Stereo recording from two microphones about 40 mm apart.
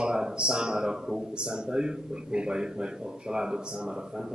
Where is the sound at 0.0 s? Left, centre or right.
Centre.